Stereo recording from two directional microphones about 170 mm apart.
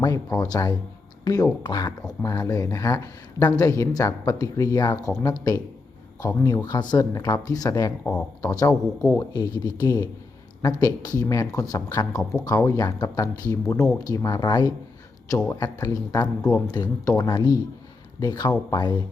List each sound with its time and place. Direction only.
0.0 s speech: 20° left (ahead or behind)
12.2 s speech: centre (ahead or behind)
12.5 s speech: 20° left (ahead or behind)